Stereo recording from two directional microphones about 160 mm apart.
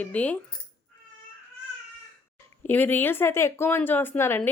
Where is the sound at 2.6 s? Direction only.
10° left (ahead or behind).